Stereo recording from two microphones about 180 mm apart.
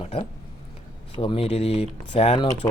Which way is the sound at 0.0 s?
30° left (ahead or behind).